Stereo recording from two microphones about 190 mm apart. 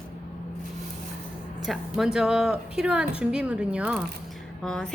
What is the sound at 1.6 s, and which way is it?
Speech, centre (ahead or behind).